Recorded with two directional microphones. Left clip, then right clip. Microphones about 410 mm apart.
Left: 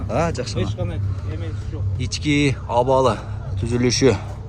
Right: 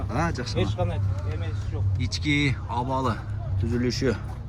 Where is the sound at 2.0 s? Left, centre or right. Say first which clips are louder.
Left 5 dB; centre.